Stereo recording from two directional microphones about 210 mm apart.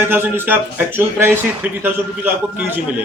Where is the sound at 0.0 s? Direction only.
10° right (ahead or behind).